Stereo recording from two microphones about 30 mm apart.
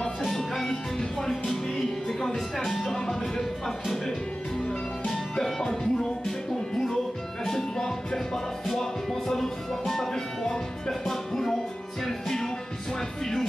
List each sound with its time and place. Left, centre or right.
0.2 s music: centre
5.6 s music: centre
7.4 s music: centre
8.6 s music: centre